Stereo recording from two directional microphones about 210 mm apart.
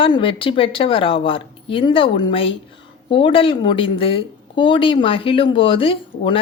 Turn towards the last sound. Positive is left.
turn(degrees=25)  # may be behind; listen again after turning